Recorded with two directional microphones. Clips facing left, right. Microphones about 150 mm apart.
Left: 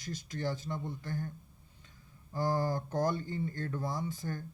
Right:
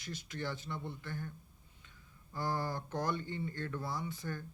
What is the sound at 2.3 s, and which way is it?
Speech, 40° left (ahead or behind).